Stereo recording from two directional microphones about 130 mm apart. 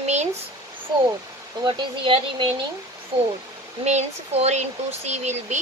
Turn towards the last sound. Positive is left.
turn(degrees=-60)  # may be behind; listen again after turning